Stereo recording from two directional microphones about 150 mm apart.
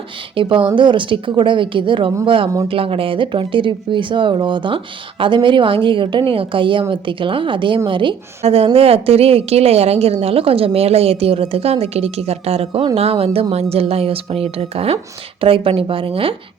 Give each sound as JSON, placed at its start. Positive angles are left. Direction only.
{"t": 0.3, "sound": "a woman's voice", "side_deg": -35}